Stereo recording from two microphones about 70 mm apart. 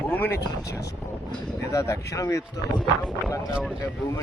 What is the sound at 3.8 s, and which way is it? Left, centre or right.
Speech, left.